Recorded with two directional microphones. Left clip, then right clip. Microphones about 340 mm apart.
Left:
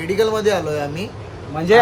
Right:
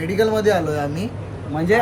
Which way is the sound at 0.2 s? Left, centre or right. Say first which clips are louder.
Right 1 dB; centre.